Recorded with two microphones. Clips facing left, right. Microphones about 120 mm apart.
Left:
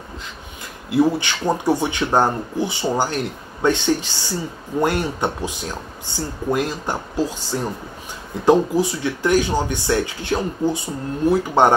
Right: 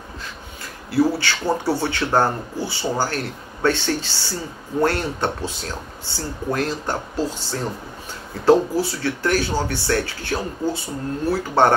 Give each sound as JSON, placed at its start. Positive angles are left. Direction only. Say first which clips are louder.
{"t": 0.8, "sound": "speech", "louder": "left 2 dB", "side_deg": 20}